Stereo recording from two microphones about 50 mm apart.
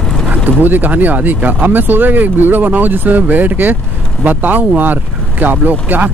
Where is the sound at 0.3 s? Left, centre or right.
Right.